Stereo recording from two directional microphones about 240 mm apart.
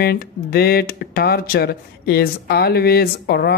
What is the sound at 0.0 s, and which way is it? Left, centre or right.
Speech, left.